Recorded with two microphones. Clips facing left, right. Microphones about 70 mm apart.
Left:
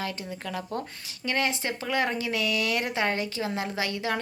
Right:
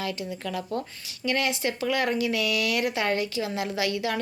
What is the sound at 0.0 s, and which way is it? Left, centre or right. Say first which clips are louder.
Speech: right 2 dB; left.